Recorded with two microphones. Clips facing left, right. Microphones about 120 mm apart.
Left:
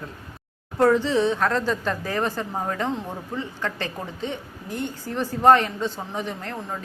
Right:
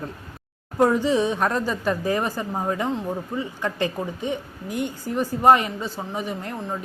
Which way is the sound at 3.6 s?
15° right (ahead or behind).